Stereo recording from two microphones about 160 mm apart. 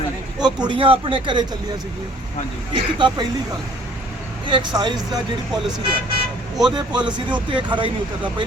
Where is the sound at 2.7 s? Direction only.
30° right (ahead or behind).